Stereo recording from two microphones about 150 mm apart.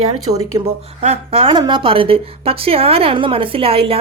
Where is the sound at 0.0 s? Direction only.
45° right (ahead or behind).